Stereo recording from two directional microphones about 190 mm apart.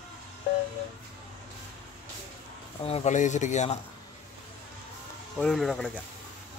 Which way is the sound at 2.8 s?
35° left (ahead or behind).